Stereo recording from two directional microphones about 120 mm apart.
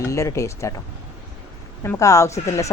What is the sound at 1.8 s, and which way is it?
Speech, 25° left (ahead or behind).